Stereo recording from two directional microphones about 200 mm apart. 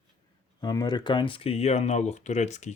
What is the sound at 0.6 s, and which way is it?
Speech, 20° left (ahead or behind).